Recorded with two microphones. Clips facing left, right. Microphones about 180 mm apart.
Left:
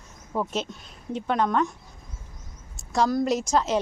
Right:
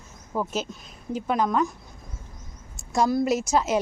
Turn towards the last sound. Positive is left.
turn(degrees=-10)  # may be behind; listen again after turning